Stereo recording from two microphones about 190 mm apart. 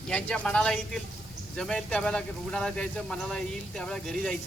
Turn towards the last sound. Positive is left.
turn(degrees=5)  # may be behind; listen again after turning